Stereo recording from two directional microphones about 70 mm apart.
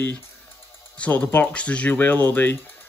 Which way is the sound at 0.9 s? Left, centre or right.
Left.